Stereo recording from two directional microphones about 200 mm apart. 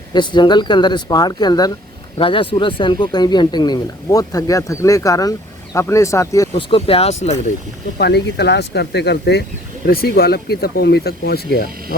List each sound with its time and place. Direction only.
0.1 s speech: 20° left (ahead or behind)
6.5 s speech: 25° left (ahead or behind)
7.9 s speech: 55° left (ahead or behind)